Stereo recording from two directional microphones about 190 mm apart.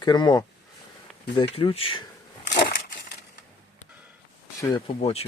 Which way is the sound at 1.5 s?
30° left (ahead or behind).